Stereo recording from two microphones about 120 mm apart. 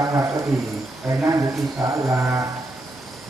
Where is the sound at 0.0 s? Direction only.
25° right (ahead or behind).